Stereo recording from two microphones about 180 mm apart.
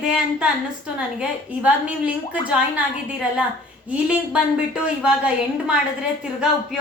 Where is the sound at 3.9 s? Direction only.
5° right (ahead or behind).